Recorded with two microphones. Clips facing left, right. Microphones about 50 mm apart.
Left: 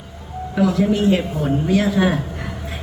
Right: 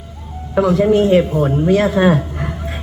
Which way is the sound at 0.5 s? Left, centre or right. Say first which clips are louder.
Right 5 dB; right.